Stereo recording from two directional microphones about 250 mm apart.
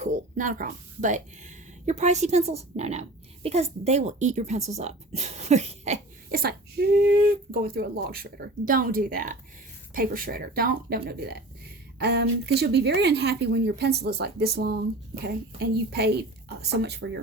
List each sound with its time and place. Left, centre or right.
0.0 s a woman's voice: right